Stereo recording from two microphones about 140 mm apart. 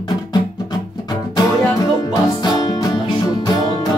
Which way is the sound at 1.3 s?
25° left (ahead or behind).